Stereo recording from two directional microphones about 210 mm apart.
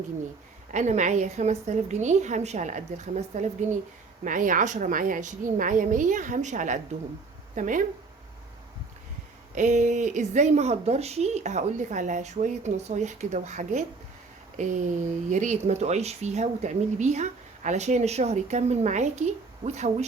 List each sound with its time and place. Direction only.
0.7 s speech: 35° right (ahead or behind)
9.6 s speech: 35° right (ahead or behind)